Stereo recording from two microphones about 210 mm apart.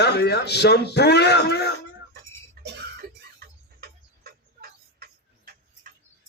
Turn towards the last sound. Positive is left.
turn(degrees=-45)  # may be behind; listen again after turning